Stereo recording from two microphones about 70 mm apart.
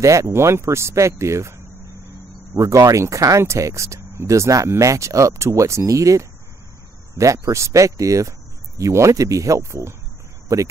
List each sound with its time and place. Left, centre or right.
0.0 s speech: right
7.4 s speech: right